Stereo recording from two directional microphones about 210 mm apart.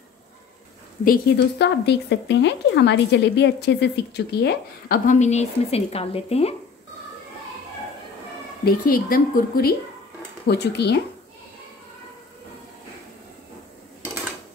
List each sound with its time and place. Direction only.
1.0 s speech: 45° left (ahead or behind); by 6.5 s 30° left (ahead or behind)
8.6 s speech: 45° left (ahead or behind)